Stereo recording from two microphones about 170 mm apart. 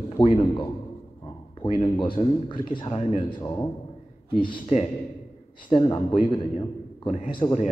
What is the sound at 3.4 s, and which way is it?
Speech, 20° left (ahead or behind).